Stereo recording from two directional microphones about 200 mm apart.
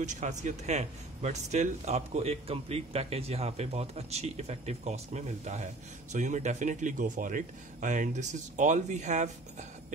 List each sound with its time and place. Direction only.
0.0 s speech: 35° right (ahead or behind)